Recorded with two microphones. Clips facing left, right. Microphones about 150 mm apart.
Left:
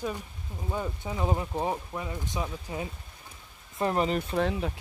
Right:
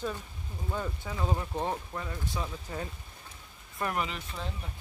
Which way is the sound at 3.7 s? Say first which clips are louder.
Left 6 dB; 30° left (ahead or behind).